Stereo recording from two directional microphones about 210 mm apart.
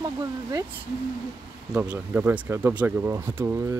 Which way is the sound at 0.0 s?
15° right (ahead or behind).